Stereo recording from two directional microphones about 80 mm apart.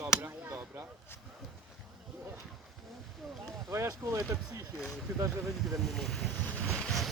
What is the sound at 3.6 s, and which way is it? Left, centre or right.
Speech, right.